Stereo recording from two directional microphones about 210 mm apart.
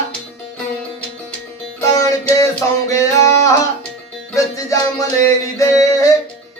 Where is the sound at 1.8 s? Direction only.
15° left (ahead or behind).